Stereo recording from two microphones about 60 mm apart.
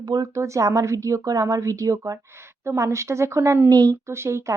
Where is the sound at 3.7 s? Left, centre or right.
Right.